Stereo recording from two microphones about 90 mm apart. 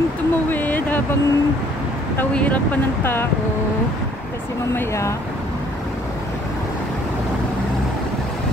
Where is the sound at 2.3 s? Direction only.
15° left (ahead or behind).